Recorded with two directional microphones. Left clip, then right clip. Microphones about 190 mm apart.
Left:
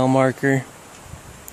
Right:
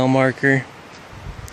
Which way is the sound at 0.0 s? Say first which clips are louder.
Right 1 dB; 10° left (ahead or behind).